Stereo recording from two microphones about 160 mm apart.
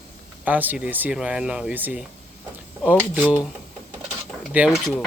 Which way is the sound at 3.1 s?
10° right (ahead or behind).